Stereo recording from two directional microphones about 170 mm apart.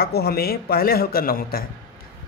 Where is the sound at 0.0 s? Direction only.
65° left (ahead or behind).